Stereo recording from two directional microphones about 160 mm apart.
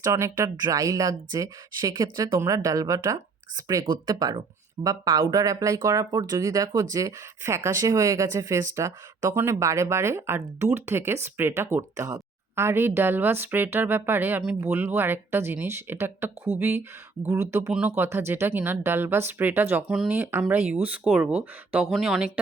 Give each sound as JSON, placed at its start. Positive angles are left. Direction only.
{"t": 0.0, "sound": "speech", "side_deg": -20}